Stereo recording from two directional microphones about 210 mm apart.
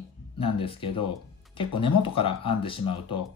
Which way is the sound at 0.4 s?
25° left (ahead or behind).